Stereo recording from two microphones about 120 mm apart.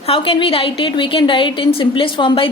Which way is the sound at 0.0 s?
50° left (ahead or behind).